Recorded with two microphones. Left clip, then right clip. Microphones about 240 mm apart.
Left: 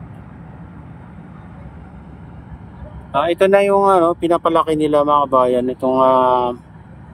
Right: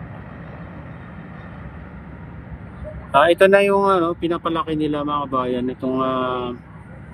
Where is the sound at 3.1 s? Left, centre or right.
Centre.